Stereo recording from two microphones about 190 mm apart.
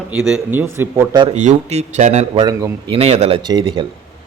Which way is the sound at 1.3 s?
35° right (ahead or behind).